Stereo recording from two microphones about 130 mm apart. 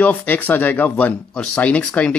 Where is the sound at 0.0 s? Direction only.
10° left (ahead or behind).